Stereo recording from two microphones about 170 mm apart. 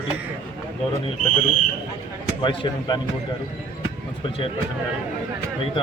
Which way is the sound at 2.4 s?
25° left (ahead or behind).